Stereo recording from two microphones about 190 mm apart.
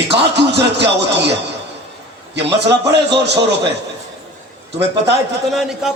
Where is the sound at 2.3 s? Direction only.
65° right (ahead or behind).